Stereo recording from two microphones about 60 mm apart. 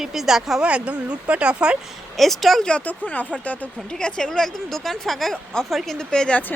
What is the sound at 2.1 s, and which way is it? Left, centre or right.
Speech, centre.